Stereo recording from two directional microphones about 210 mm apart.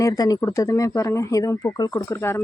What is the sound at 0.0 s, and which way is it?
Speech, 15° left (ahead or behind).